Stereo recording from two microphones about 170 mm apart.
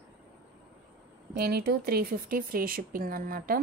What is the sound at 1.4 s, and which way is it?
Speech, 65° right (ahead or behind).